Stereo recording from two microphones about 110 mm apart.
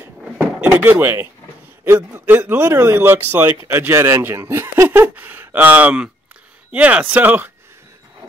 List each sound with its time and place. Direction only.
0.2 s door: 15° right (ahead or behind)
1.9 s a man's voice: 25° right (ahead or behind)